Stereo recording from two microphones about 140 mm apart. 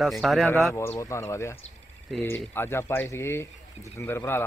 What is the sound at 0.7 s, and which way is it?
Speech, 20° left (ahead or behind).